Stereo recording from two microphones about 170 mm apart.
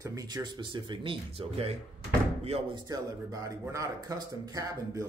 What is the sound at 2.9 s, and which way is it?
Speech, 20° right (ahead or behind).